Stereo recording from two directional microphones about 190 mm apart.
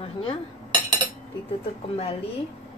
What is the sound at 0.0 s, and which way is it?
Speech, 30° left (ahead or behind).